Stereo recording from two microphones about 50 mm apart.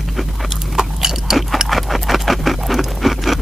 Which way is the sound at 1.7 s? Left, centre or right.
Centre.